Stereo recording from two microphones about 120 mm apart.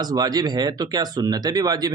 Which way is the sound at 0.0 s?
35° right (ahead or behind).